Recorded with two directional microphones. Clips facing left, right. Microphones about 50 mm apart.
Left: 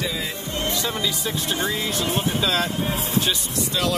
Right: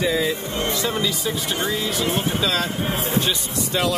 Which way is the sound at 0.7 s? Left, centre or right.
Centre.